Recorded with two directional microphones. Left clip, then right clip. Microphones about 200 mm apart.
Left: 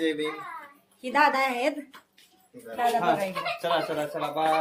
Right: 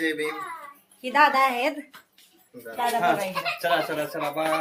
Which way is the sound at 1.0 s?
5° right (ahead or behind).